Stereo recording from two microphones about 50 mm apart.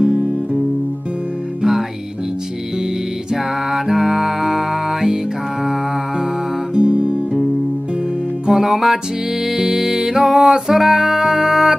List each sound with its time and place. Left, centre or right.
0.0 s music: centre
1.6 s music: centre
3.7 s music: centre
6.7 s music: right
8.5 s music: centre